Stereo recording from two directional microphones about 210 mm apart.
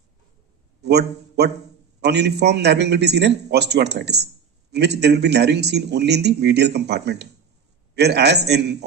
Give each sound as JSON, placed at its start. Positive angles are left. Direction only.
{"t": 0.8, "sound": "a man's voice", "side_deg": -50}